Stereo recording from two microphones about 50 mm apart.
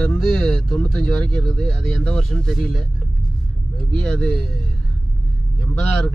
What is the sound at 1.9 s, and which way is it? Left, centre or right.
Speech, left.